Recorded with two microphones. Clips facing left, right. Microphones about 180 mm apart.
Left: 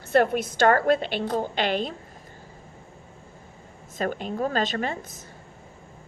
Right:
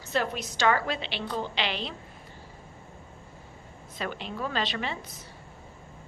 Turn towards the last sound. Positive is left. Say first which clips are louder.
# left 5 dB
turn(degrees=45)  # may be behind; listen again after turning